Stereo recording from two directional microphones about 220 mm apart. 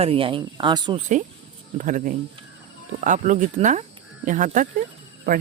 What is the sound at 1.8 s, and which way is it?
Speech, 35° right (ahead or behind).